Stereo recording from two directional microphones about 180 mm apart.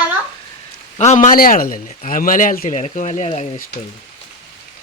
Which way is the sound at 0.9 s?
40° left (ahead or behind).